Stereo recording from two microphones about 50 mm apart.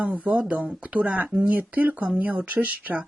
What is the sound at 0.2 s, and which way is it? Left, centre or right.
Speech, right.